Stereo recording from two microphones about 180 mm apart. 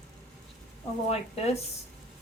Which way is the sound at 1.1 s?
35° left (ahead or behind).